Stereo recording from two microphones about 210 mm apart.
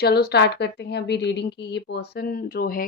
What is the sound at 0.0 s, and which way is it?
A woman's voice, 50° left (ahead or behind).